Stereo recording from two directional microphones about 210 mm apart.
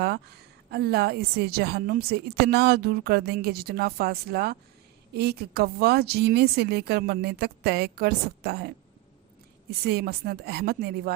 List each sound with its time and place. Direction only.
0.0 s a woman's voice: 50° right (ahead or behind)